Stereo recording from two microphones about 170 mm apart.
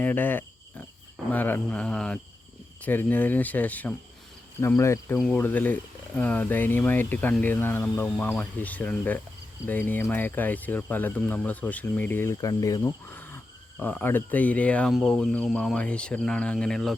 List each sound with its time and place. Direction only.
0.0 s speech: 10° left (ahead or behind)